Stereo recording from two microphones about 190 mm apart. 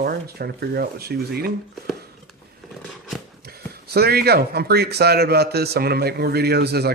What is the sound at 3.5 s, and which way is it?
Speech, 55° right (ahead or behind).